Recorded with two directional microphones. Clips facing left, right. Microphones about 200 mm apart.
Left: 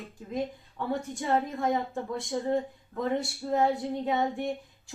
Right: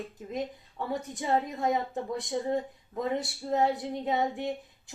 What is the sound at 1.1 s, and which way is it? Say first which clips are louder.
A woman's voice: right 1 dB; 20° right (ahead or behind).